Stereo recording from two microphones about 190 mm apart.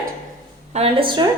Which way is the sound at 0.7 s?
30° right (ahead or behind).